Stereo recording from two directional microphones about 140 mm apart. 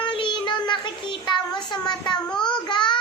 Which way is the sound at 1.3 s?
30° left (ahead or behind).